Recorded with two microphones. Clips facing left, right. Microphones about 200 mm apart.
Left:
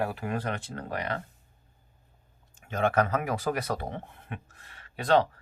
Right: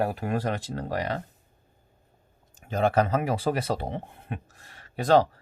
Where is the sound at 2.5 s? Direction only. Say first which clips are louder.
Right 2 dB; 35° right (ahead or behind).